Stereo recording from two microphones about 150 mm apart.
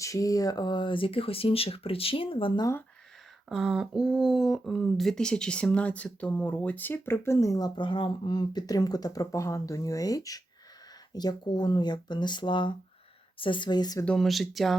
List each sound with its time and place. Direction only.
0.0 s speech: 20° left (ahead or behind)
3.5 s speech: 5° right (ahead or behind); by 14.0 s 30° left (ahead or behind)
14.0 s speech: 5° left (ahead or behind)